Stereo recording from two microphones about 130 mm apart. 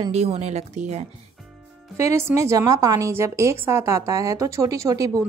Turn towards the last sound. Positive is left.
turn(degrees=-25)  # may be behind; listen again after turning